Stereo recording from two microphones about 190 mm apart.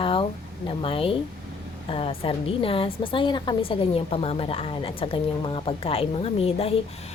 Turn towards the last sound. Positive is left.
turn(degrees=30)  # may be behind; listen again after turning